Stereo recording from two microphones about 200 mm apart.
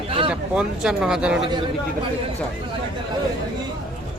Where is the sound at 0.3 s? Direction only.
5° right (ahead or behind).